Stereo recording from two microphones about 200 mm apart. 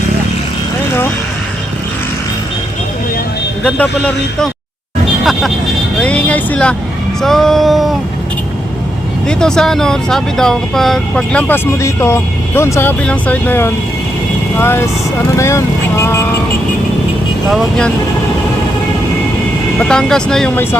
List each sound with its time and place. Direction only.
3.6 s speech: 5° left (ahead or behind)
9.2 s speech: 5° left (ahead or behind)
17.5 s speech: centre (ahead or behind)
19.8 s speech: 5° left (ahead or behind)